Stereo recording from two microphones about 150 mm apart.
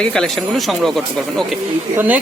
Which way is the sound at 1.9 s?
10° right (ahead or behind).